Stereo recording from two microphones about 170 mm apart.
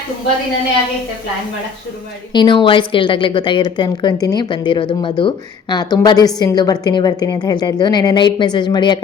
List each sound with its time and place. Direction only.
2.3 s a woman's voice: 25° left (ahead or behind)